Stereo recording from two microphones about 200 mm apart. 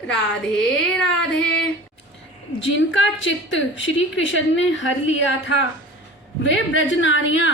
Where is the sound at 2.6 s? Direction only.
65° left (ahead or behind).